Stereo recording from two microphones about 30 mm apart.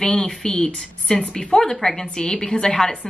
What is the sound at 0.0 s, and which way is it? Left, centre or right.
A woman's voice, left.